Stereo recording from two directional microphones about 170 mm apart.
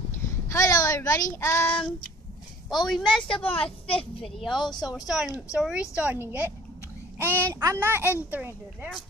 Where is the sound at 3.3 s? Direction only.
35° left (ahead or behind).